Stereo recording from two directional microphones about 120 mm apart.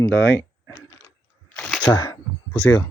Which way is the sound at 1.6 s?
10° left (ahead or behind).